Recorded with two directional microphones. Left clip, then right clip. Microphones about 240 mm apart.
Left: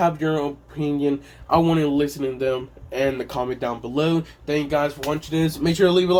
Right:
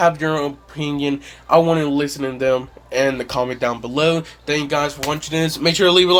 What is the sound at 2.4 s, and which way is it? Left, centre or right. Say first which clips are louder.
A man's voice: right 6 dB; right.